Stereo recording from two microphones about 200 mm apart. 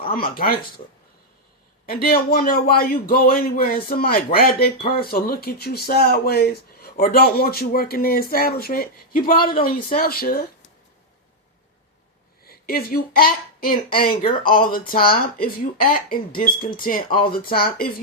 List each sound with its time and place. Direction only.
0.1 s speech: 45° left (ahead or behind)
1.9 s speech: 50° left (ahead or behind)
12.5 s speech: 45° left (ahead or behind)